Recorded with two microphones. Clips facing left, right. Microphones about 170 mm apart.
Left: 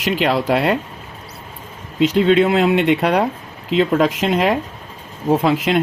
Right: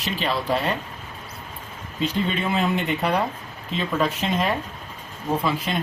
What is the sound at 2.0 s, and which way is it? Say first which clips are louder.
Speech: left 11 dB; 85° left.